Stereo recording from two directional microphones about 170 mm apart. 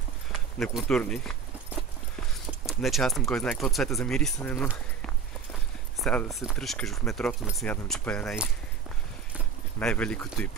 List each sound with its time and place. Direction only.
0.6 s speech: 5° left (ahead or behind)
2.6 s speech: centre (ahead or behind)
5.9 s speech: 5° left (ahead or behind)
9.8 s speech: 5° left (ahead or behind)